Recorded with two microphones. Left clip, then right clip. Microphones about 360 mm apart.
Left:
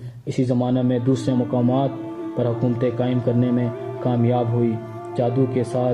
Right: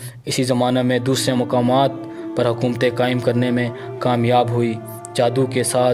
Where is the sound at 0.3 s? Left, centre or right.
Right.